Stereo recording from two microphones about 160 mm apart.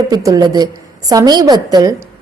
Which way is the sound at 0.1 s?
20° right (ahead or behind).